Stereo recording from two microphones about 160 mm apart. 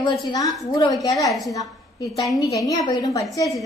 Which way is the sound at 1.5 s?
25° left (ahead or behind).